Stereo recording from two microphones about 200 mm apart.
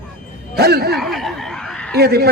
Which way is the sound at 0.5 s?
50° right (ahead or behind).